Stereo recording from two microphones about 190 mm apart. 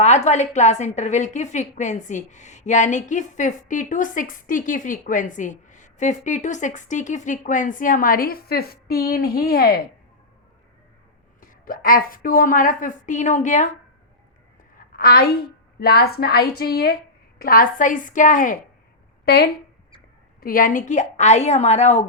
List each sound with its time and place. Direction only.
0.0 s a woman's voice: 35° left (ahead or behind); by 9.8 s 55° left (ahead or behind)
11.3 s a woman's voice: 50° left (ahead or behind)
14.9 s a woman's voice: 55° left (ahead or behind)
19.2 s speech: 60° left (ahead or behind)
20.4 s a woman's voice: 50° left (ahead or behind)